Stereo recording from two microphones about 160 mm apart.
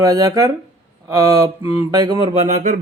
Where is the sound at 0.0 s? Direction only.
25° right (ahead or behind).